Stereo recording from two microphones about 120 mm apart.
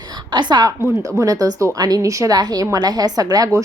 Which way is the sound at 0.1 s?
40° right (ahead or behind).